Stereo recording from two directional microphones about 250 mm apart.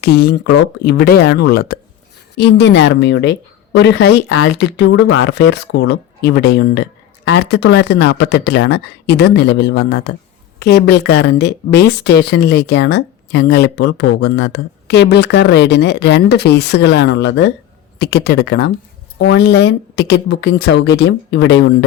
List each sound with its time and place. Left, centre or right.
0.0 s a woman's voice: left